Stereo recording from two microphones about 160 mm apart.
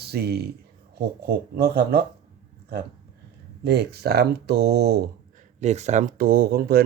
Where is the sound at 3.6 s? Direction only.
90° right.